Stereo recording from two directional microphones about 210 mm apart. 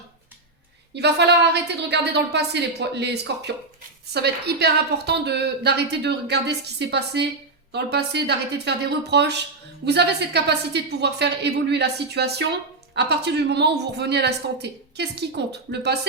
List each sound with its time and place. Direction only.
0.9 s a woman's voice: 55° right (ahead or behind)